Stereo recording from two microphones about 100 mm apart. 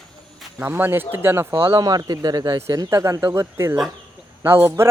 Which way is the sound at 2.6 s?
30° right (ahead or behind).